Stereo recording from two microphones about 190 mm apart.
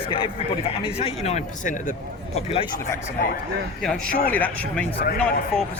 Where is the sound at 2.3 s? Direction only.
30° left (ahead or behind).